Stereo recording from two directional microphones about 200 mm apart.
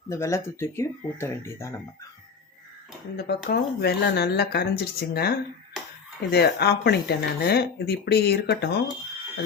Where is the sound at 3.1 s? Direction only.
55° left (ahead or behind).